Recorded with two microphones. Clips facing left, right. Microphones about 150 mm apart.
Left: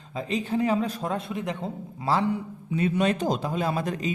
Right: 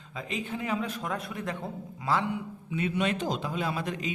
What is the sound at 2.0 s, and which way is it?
A man's voice, 35° left (ahead or behind).